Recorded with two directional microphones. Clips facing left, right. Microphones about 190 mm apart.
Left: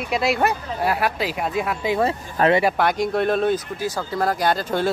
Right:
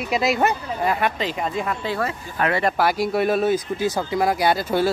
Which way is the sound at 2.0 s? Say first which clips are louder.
Left 4 dB; 30° left (ahead or behind).